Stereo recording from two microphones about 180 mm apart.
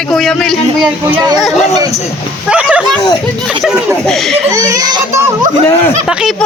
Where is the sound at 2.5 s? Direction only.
5° right (ahead or behind).